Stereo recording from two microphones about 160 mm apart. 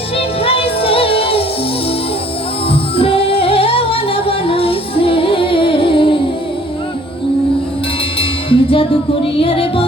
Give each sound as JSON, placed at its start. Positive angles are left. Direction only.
{"t": 0.2, "sound": "music", "side_deg": 35}
{"t": 3.0, "sound": "music", "side_deg": 35}
{"t": 8.2, "sound": "music", "side_deg": 35}